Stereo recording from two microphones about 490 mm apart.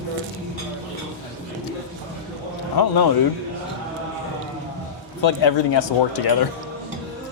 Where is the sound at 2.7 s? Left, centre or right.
Left.